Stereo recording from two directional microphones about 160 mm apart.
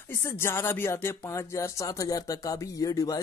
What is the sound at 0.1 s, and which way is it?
Speech, 15° left (ahead or behind).